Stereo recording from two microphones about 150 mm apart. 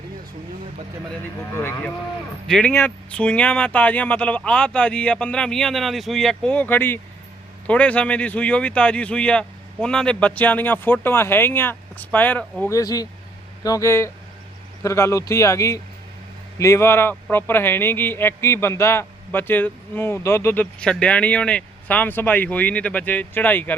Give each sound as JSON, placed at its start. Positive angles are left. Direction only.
{"t": 2.5, "sound": "a man's voice", "side_deg": 10}
{"t": 12.7, "sound": "a man's voice", "side_deg": 25}